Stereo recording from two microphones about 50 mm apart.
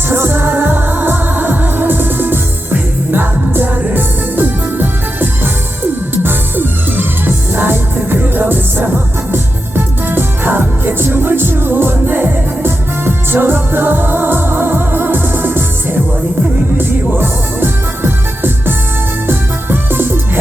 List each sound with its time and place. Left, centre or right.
0.1 s music: right